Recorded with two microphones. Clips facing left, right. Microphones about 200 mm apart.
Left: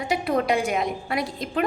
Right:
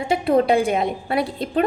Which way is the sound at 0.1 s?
30° right (ahead or behind).